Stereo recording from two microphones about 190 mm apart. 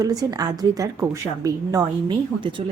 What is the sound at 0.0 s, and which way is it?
A woman's voice, 20° right (ahead or behind).